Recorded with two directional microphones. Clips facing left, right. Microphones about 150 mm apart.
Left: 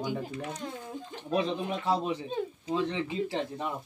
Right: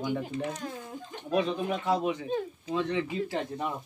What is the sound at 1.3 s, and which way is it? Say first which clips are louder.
A man's voice: right 2 dB; 30° left (ahead or behind).